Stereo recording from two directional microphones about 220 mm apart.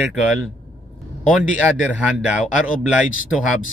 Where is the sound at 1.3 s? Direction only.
5° right (ahead or behind).